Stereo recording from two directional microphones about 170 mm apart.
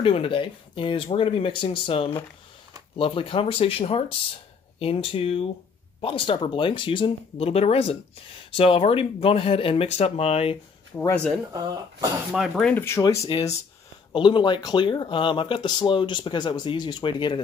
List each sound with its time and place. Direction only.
0.0 s speech: 30° left (ahead or behind)
11.0 s speech: 15° left (ahead or behind)
12.3 s speech: centre (ahead or behind)
12.8 s speech: 15° left (ahead or behind)
13.3 s speech: 30° left (ahead or behind)